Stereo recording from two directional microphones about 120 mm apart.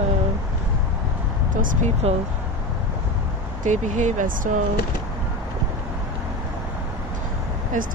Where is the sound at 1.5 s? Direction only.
90° right.